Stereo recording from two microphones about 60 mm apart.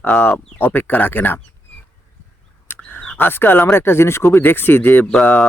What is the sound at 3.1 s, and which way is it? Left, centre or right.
Speech, left.